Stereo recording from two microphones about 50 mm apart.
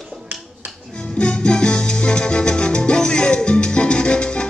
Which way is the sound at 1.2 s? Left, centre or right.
Centre.